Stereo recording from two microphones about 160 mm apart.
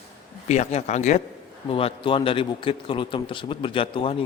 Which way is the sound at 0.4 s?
45° left (ahead or behind).